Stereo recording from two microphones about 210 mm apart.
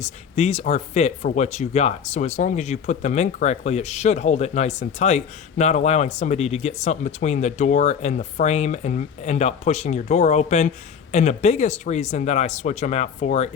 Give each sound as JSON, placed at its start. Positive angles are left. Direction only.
{"t": 0.0, "sound": "speech", "side_deg": 30}